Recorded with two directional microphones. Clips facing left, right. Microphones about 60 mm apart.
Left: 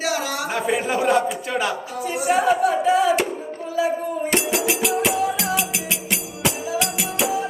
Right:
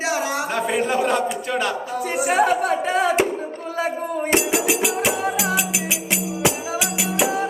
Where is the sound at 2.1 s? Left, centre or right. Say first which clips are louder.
Even; right.